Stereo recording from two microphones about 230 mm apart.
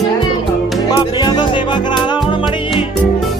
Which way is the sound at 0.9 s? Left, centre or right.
Centre.